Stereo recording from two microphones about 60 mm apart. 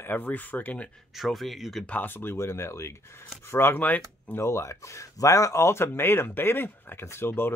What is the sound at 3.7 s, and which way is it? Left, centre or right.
Speech, left.